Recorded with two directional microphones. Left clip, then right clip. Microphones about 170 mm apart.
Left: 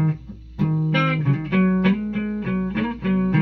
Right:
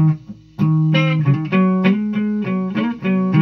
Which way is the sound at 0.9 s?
30° left (ahead or behind).